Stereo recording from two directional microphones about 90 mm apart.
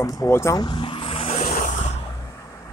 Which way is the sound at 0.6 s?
60° left (ahead or behind).